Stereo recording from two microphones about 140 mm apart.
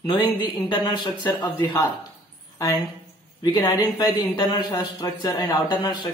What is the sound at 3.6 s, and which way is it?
Speech, 30° left (ahead or behind).